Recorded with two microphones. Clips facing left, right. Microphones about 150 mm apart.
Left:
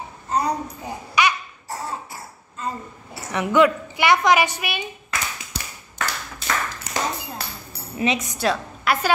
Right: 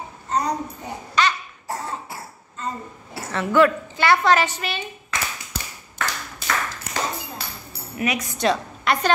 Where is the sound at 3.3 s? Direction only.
15° left (ahead or behind).